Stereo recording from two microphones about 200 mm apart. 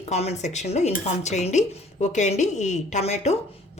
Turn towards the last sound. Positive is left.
turn(degrees=35)  # may be behind; listen again after turning